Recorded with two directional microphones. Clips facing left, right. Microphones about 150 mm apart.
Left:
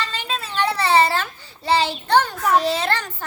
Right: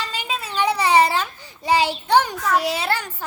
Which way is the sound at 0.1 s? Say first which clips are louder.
Even; 10° right (ahead or behind).